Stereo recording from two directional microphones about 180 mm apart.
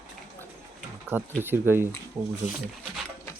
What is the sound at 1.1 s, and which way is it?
Speech, 10° right (ahead or behind).